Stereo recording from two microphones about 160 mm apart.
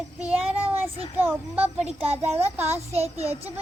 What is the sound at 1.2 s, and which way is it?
A child's voice, 10° right (ahead or behind).